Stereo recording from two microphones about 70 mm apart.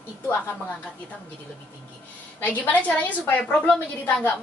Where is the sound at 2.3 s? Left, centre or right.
Left.